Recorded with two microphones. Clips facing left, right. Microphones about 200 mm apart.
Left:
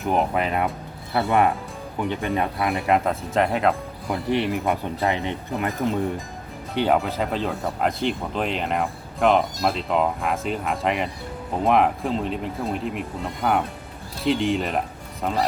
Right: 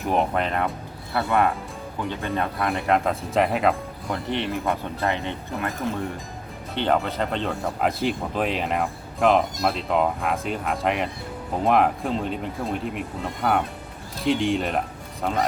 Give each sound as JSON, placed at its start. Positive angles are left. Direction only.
{"t": 0.0, "sound": "speech", "side_deg": 0}
{"t": 1.3, "sound": "speech", "side_deg": 15}
{"t": 2.6, "sound": "speech", "side_deg": 0}
{"t": 4.1, "sound": "speech", "side_deg": 10}
{"t": 6.7, "sound": "speech", "side_deg": 5}